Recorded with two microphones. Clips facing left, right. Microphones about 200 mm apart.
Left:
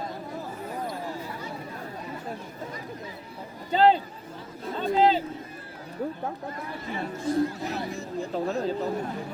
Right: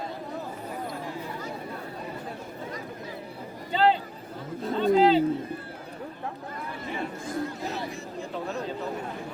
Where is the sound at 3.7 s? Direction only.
40° left (ahead or behind).